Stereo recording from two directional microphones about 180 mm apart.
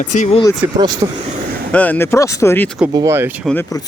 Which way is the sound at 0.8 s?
20° right (ahead or behind).